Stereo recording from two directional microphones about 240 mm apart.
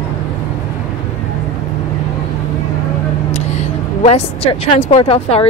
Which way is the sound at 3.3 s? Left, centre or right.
Left.